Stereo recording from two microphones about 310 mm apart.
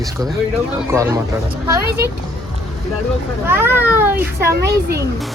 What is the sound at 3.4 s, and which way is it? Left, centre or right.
Speech, centre.